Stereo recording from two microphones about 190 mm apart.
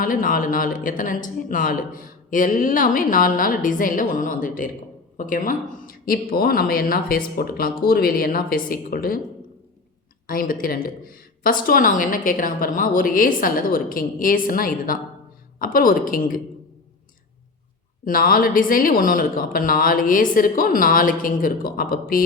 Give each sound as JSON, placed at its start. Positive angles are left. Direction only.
{"t": 0.0, "sound": "speech", "side_deg": 45}
{"t": 10.2, "sound": "speech", "side_deg": 50}
{"t": 18.0, "sound": "speech", "side_deg": 50}